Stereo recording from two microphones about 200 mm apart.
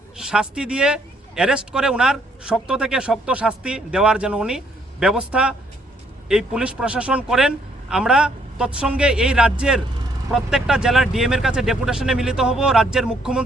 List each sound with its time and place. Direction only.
0.3 s speech: 5° right (ahead or behind)